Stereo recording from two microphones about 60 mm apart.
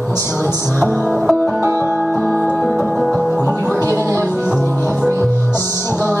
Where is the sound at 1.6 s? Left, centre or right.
Right.